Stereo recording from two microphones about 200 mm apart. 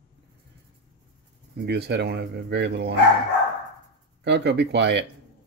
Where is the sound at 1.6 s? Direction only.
55° right (ahead or behind).